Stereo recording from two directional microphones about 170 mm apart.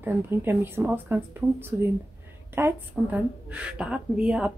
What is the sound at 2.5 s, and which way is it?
A woman's voice, 10° right (ahead or behind).